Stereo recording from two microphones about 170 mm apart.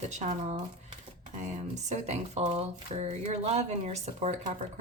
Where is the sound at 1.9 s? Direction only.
40° right (ahead or behind).